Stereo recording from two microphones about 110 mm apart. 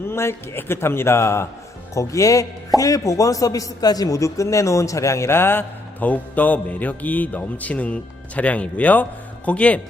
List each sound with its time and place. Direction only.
0.0 s a man's voice: 20° left (ahead or behind)